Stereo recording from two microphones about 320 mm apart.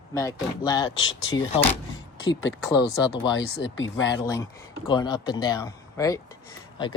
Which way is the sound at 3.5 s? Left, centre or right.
Left.